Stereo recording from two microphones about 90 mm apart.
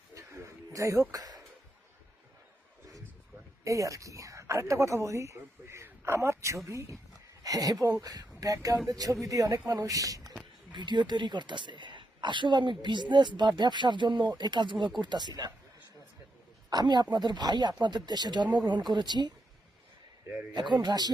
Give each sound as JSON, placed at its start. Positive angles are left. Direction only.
{"t": 0.1, "sound": "a sound", "side_deg": -35}
{"t": 1.1, "sound": "speech", "side_deg": -40}
{"t": 3.6, "sound": "speech", "side_deg": -35}
{"t": 10.7, "sound": "a woman's voice", "side_deg": -55}
{"t": 16.6, "sound": "speech", "side_deg": -50}
{"t": 20.5, "sound": "speech", "side_deg": -60}